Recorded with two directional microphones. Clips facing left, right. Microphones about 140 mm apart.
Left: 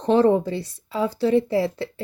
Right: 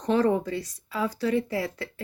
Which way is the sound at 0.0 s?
30° left (ahead or behind).